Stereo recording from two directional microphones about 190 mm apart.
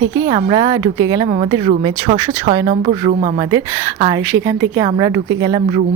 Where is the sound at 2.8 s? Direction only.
40° right (ahead or behind).